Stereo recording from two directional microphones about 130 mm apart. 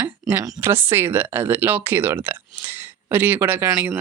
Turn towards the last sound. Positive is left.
turn(degrees=-15)  # may be behind; listen again after turning